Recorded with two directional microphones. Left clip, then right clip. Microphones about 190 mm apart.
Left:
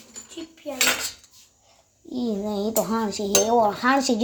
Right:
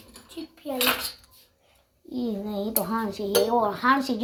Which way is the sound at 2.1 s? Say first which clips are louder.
Left 3 dB; 25° left (ahead or behind).